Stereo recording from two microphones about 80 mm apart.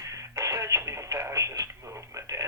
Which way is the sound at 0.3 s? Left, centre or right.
Right.